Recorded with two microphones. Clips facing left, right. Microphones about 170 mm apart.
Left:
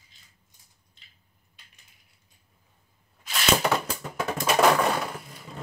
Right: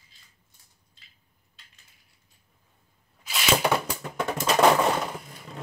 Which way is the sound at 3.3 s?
Centre (ahead or behind).